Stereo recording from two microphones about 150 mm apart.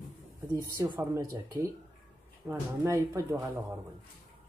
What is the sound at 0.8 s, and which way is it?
Speech, 20° right (ahead or behind).